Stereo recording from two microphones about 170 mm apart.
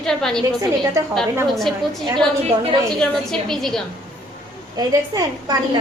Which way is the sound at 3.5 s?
Centre (ahead or behind).